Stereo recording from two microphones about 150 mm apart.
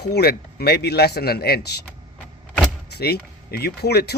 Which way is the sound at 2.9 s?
90° left.